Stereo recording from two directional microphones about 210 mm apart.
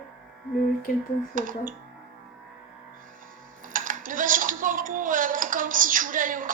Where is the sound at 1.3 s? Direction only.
40° right (ahead or behind).